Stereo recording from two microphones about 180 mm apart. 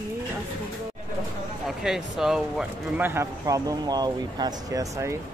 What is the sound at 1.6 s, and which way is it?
Speech, centre (ahead or behind).